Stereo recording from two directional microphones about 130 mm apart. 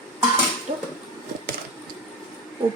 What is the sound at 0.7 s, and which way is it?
Speech, 45° right (ahead or behind).